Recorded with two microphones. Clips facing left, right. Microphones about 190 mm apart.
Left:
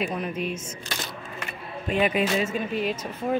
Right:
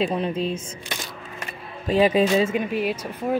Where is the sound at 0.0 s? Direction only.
30° right (ahead or behind).